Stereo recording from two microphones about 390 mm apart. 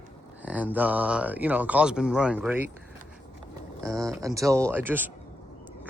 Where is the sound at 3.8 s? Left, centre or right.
Centre.